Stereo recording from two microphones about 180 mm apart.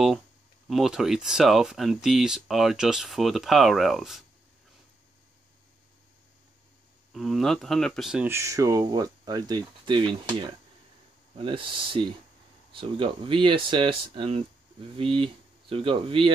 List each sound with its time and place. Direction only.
0.7 s speech: centre (ahead or behind)
7.1 s speech: centre (ahead or behind); by 16.3 s 30° right (ahead or behind)